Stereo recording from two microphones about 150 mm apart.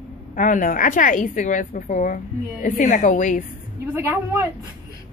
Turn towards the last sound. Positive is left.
turn(degrees=-20)  # may be behind; listen again after turning